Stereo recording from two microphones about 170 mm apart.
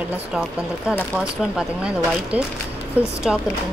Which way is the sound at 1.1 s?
5° right (ahead or behind).